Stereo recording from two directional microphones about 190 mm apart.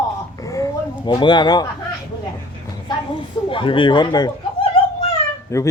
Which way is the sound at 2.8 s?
25° left (ahead or behind).